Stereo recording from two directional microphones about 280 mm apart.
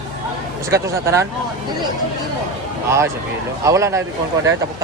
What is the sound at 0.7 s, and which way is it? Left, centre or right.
Speech, centre.